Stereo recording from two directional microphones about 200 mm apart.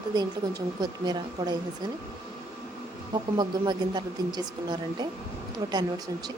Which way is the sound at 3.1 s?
20° right (ahead or behind).